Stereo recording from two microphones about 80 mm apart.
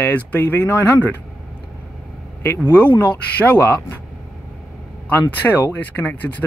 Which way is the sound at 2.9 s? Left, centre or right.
Centre.